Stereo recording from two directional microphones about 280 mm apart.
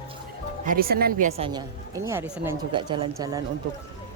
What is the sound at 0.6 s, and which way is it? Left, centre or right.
Speech, right.